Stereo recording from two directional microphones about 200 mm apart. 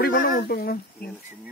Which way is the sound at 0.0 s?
50° left (ahead or behind).